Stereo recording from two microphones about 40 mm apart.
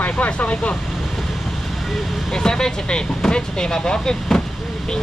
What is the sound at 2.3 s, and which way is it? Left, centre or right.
Speech, centre.